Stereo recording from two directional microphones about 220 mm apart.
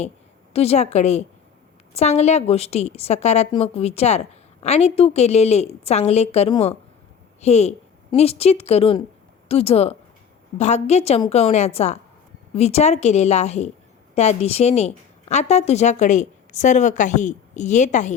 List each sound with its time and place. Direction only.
0.5 s a woman's voice: 30° left (ahead or behind)